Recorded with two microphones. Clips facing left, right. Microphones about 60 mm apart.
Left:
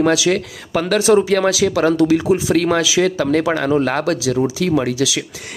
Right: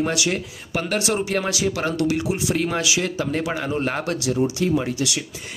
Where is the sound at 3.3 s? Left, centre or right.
Left.